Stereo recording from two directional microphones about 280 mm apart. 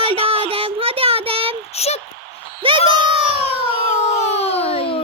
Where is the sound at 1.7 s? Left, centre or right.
Left.